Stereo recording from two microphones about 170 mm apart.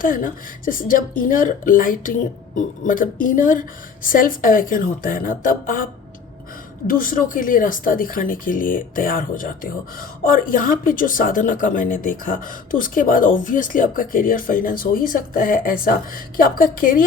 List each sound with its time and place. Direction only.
0.0 s speech: 55° left (ahead or behind)